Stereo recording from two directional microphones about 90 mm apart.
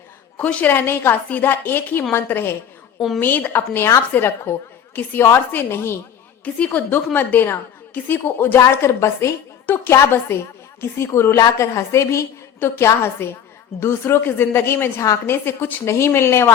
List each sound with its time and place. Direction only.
0.3 s a woman's voice: 15° left (ahead or behind)
6.4 s a woman's voice: 15° left (ahead or behind)